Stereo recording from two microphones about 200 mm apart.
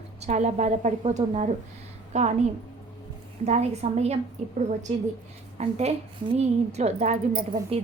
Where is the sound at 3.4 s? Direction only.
35° right (ahead or behind).